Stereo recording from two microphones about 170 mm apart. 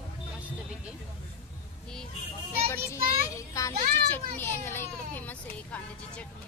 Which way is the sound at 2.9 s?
15° left (ahead or behind).